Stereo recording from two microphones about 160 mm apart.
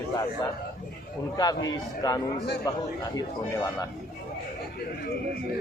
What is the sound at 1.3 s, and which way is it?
A man's voice, 25° left (ahead or behind).